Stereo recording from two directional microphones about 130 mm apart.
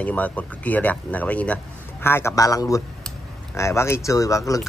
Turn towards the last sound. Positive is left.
turn(degrees=25)  # may be behind; listen again after turning